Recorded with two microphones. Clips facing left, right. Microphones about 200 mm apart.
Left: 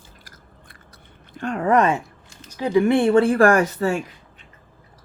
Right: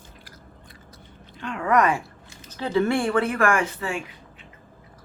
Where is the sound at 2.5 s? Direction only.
15° left (ahead or behind); by 4.0 s 40° left (ahead or behind).